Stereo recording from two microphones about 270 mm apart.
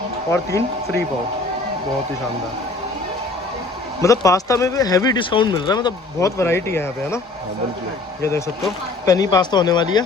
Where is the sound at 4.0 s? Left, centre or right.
Centre.